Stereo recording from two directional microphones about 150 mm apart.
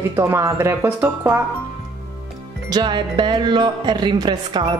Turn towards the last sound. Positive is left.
turn(degrees=-30)  # may be behind; listen again after turning